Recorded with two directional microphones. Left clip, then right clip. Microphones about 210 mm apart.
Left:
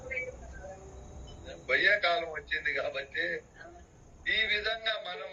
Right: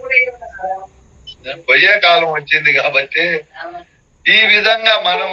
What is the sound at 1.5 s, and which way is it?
Mantra, 55° right (ahead or behind).